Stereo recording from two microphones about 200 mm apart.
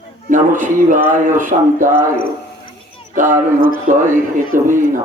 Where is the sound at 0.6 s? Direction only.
40° right (ahead or behind).